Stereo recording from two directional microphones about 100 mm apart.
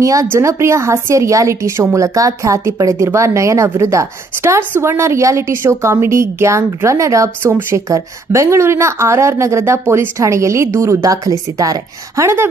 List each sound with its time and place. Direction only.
0.0 s a woman's voice: 35° right (ahead or behind)